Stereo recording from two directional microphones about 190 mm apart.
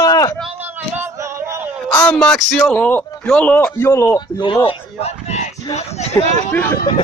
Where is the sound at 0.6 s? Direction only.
10° right (ahead or behind).